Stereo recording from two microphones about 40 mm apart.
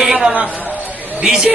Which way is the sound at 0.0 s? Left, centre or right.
Centre.